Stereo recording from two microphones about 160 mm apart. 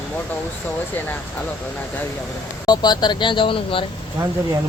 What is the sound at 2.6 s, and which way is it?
Speech, 25° left (ahead or behind).